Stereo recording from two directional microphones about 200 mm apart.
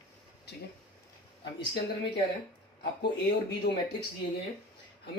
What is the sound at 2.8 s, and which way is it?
Speech, 55° left (ahead or behind).